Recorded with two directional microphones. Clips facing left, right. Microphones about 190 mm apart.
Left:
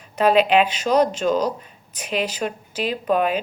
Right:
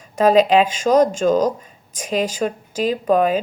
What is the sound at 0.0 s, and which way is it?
Speech, 40° right (ahead or behind).